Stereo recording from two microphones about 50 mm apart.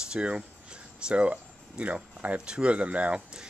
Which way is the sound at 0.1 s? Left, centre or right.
Right.